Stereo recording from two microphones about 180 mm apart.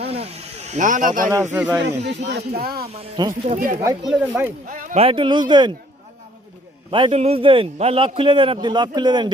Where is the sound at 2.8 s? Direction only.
30° right (ahead or behind).